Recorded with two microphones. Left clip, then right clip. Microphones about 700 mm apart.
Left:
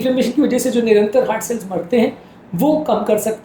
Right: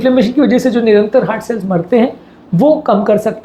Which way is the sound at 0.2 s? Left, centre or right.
Right.